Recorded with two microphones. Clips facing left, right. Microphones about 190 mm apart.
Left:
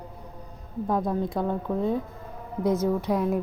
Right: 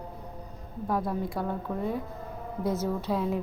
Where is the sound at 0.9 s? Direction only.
20° left (ahead or behind).